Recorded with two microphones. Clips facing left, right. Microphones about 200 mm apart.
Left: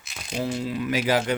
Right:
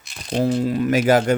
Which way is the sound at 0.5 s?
45° right (ahead or behind).